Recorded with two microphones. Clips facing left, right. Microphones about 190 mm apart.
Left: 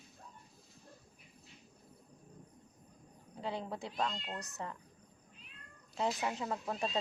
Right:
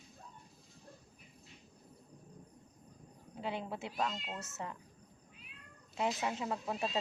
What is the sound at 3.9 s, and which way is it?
Speech, 5° right (ahead or behind).